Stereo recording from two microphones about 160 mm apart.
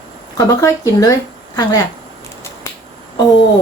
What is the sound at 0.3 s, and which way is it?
Speech, 20° left (ahead or behind).